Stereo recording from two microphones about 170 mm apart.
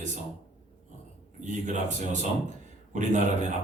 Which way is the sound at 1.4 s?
45° right (ahead or behind).